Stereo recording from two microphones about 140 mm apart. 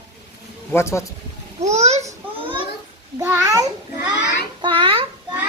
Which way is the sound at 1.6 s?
50° right (ahead or behind).